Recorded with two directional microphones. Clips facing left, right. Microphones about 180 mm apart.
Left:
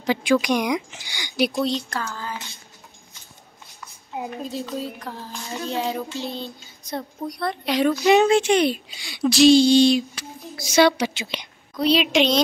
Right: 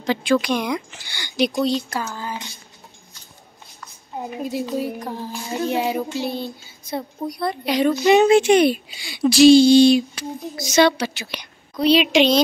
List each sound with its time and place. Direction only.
0.0 s speech: 15° left (ahead or behind)
1.5 s speech: centre (ahead or behind)
2.0 s a sound: 15° right (ahead or behind)
4.2 s a sound: 10° right (ahead or behind)
6.9 s speech: centre (ahead or behind)
10.6 s speech: 10° left (ahead or behind)
11.7 s speech: centre (ahead or behind)